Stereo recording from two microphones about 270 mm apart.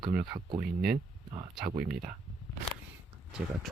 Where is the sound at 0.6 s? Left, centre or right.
Right.